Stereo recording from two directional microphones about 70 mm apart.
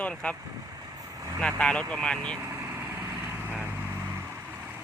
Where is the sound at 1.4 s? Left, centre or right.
Centre.